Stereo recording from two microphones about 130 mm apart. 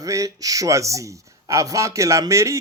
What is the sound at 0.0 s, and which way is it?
Speech, 25° right (ahead or behind).